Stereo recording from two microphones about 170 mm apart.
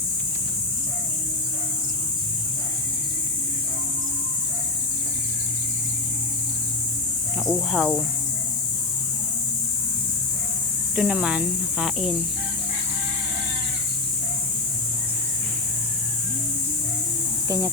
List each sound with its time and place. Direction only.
7.4 s speech: centre (ahead or behind)
10.9 s speech: 5° right (ahead or behind)